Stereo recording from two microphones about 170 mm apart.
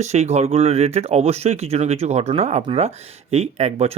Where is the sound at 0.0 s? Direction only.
40° right (ahead or behind).